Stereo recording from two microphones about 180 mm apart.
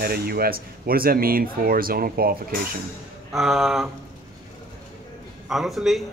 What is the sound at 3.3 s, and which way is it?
Speech, centre (ahead or behind).